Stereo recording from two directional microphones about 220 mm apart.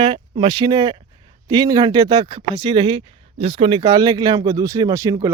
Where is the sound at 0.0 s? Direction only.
20° right (ahead or behind).